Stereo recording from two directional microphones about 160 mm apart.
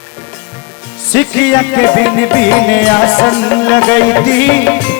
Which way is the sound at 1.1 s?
10° left (ahead or behind).